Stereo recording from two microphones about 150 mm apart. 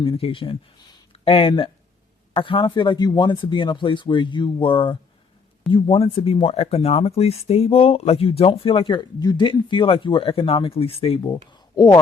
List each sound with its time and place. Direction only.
0.0 s speech: 35° left (ahead or behind)